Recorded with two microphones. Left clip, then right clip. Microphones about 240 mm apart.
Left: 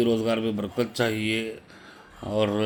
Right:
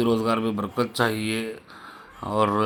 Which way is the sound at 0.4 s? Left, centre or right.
Centre.